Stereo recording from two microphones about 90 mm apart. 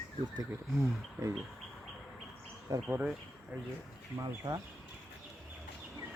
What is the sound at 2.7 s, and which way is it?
Speech, 35° right (ahead or behind).